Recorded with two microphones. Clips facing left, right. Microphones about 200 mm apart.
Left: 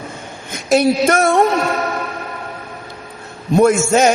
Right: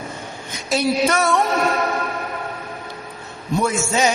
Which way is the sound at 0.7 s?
50° left (ahead or behind).